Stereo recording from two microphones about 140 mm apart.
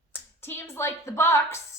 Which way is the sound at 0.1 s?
15° left (ahead or behind).